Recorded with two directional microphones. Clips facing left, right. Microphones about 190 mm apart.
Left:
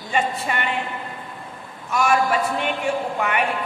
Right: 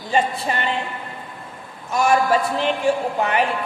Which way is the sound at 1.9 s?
30° right (ahead or behind).